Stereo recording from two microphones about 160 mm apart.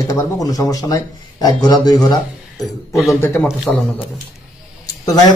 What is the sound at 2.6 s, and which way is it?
Speech, centre (ahead or behind).